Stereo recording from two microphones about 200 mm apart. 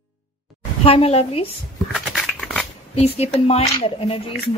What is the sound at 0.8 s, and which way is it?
Speech, 30° left (ahead or behind).